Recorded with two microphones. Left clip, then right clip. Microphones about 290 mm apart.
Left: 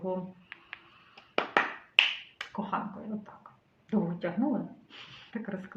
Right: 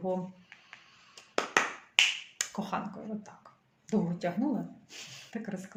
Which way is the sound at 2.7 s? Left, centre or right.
Right.